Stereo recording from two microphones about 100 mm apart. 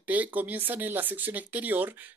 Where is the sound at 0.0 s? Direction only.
15° right (ahead or behind).